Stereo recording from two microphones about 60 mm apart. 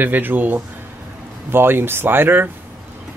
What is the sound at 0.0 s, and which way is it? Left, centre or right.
Speech, right.